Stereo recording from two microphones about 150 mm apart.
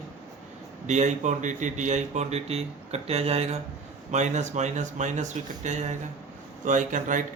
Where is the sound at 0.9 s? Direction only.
50° right (ahead or behind).